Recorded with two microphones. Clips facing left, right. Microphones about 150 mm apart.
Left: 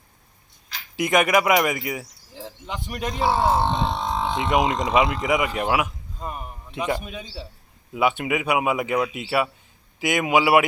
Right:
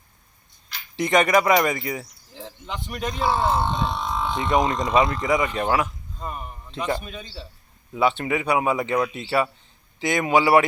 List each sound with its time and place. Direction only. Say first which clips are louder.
0.9 s speech: right 1 dB; 10° left (ahead or behind)
3.6 s a sound: left 2 dB; 30° left (ahead or behind)
4.4 s a man's voice: right 1 dB; 10° left (ahead or behind)